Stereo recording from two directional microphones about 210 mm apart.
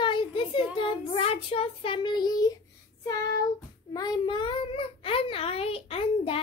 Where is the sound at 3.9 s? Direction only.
20° left (ahead or behind).